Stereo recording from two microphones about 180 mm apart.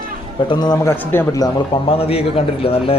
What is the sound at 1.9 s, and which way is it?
A man's voice, 30° left (ahead or behind).